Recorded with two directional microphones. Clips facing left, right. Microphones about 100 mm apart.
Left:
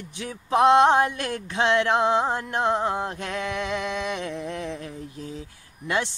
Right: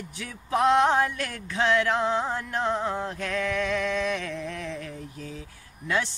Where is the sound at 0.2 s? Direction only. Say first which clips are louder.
Left 4 dB; 20° left (ahead or behind).